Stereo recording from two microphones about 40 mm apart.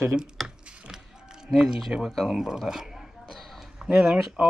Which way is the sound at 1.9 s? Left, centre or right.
Centre.